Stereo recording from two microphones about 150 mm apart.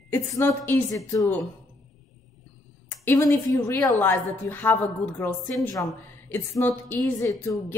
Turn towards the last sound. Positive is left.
turn(degrees=20)  # may be behind; listen again after turning